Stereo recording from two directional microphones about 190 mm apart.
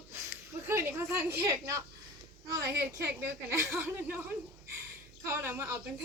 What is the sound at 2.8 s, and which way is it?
Speech, 15° right (ahead or behind).